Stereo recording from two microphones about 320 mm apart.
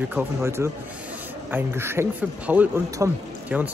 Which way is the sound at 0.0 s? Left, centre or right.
Centre.